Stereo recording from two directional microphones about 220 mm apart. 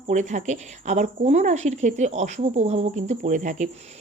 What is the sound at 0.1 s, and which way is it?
Speech, 35° right (ahead or behind).